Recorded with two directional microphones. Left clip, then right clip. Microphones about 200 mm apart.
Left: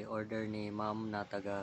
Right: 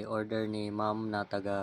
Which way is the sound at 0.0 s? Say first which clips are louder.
Right 6 dB; 15° right (ahead or behind).